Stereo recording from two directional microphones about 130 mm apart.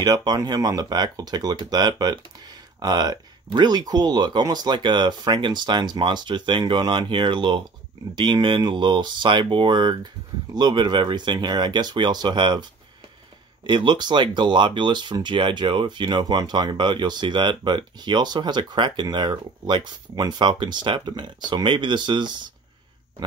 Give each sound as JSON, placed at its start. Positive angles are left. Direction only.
{"t": 0.0, "sound": "speech", "side_deg": -30}
{"t": 13.7, "sound": "speech", "side_deg": -35}